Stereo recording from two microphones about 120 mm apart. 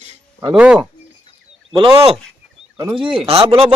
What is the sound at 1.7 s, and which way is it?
Speech, 50° right (ahead or behind).